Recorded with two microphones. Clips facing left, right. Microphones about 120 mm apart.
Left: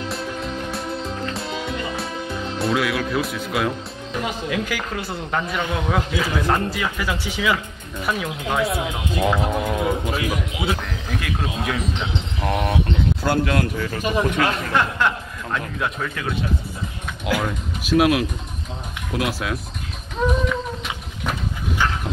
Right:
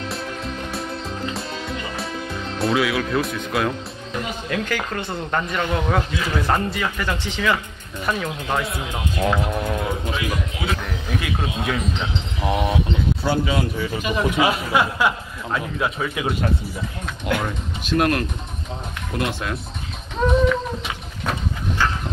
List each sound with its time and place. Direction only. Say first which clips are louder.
2.6 s speech: right 2 dB; centre (ahead or behind)
10.3 s speech: left 2 dB; 20° left (ahead or behind)
11.1 s a man's voice: right 1 dB; centre (ahead or behind)
20.2 s a sound: right 4 dB; 5° left (ahead or behind)